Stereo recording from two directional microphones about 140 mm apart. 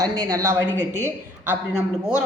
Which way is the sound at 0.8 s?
60° right (ahead or behind).